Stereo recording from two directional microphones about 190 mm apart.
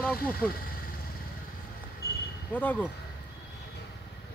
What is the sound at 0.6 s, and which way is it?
Vehicle, 50° left (ahead or behind).